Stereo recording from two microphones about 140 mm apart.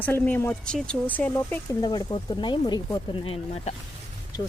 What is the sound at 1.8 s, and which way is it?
Speech, 30° left (ahead or behind).